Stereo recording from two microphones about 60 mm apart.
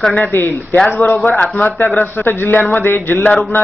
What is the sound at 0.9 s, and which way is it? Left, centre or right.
Speech, left.